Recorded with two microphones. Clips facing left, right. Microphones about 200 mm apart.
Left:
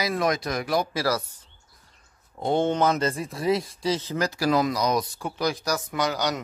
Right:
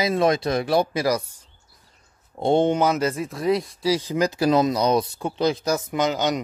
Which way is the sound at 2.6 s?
10° right (ahead or behind).